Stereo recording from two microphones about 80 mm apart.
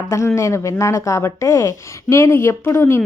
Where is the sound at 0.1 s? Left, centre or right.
Left.